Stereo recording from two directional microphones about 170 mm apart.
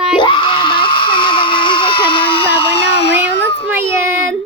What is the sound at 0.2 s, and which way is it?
Screaming, 30° left (ahead or behind).